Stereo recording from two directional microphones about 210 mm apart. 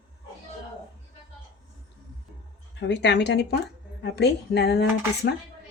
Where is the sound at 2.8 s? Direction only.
55° left (ahead or behind).